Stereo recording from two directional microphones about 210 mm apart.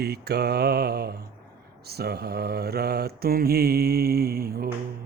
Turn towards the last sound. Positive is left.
turn(degrees=-45)  # may be behind; listen again after turning